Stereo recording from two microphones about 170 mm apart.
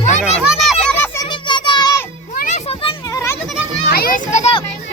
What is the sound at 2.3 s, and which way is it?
Children playing, 45° left (ahead or behind).